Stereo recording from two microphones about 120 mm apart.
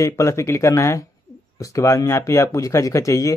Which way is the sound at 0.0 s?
25° left (ahead or behind).